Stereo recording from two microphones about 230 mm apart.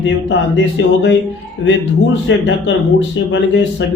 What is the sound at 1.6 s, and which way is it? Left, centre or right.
A man's voice, left.